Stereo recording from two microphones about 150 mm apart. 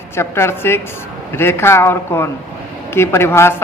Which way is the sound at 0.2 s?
15° left (ahead or behind).